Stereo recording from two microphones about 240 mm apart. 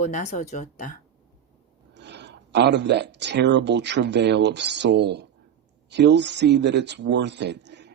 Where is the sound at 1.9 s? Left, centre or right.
Right.